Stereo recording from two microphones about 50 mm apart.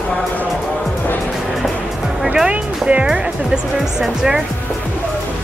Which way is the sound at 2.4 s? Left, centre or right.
Centre.